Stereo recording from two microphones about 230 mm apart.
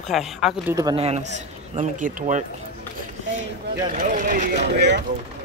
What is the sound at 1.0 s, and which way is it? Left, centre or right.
A man's voice, right.